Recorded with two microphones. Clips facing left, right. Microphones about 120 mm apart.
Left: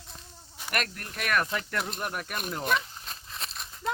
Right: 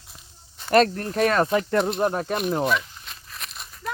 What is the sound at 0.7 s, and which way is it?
Speech, 30° right (ahead or behind).